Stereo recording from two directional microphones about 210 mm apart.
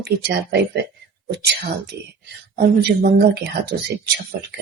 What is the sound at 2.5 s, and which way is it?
A woman's voice, 45° right (ahead or behind).